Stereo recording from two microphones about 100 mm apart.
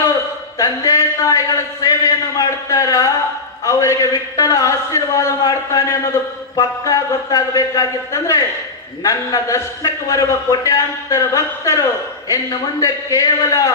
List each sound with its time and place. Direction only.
0.6 s a man's voice: 35° left (ahead or behind)